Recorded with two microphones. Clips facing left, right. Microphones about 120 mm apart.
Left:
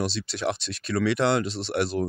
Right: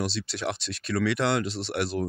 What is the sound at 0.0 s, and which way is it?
Speech, 25° left (ahead or behind).